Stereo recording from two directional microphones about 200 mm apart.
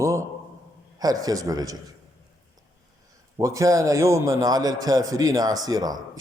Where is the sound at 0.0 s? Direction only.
15° right (ahead or behind).